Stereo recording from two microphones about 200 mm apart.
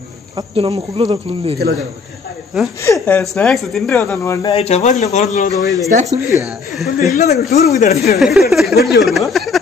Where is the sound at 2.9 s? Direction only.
5° left (ahead or behind).